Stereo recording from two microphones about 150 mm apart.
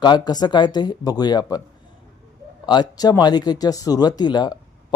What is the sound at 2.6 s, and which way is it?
Speech, 25° left (ahead or behind).